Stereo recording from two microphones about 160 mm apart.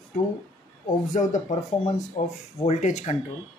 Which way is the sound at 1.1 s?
50° left (ahead or behind).